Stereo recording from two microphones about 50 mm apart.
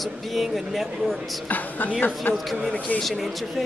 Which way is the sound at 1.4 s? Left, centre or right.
Left.